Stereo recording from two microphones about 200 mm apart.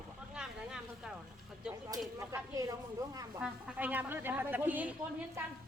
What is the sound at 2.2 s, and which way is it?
A woman's voice, 15° right (ahead or behind).